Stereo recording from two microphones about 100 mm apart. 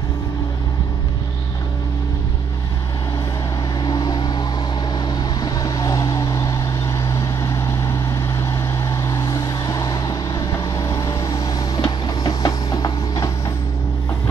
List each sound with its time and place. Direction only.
3.8 s vehicle: 45° left (ahead or behind)
9.1 s vehicle: 35° left (ahead or behind)
11.8 s music: 40° left (ahead or behind)